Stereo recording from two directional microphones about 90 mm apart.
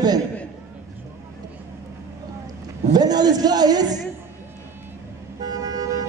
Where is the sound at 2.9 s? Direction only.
50° right (ahead or behind).